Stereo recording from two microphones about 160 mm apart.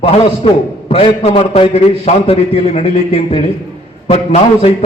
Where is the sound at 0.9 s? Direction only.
40° left (ahead or behind).